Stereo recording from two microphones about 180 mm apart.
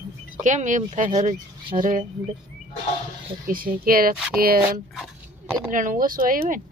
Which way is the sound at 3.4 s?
50° right (ahead or behind).